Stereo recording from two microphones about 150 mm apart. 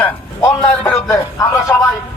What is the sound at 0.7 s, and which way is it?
A man's voice, 15° left (ahead or behind).